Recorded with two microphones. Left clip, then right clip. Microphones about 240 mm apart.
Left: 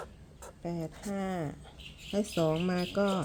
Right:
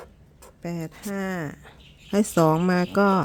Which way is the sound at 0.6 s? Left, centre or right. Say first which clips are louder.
Right 5 dB; right.